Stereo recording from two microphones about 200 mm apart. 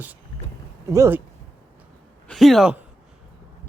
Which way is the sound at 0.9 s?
15° right (ahead or behind).